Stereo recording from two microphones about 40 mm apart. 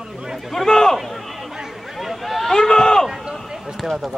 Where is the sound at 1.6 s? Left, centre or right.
Centre.